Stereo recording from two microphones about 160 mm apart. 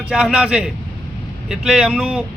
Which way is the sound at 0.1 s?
5° right (ahead or behind).